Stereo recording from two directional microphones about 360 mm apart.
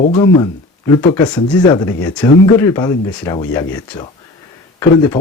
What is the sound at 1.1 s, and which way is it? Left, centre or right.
Speech, centre.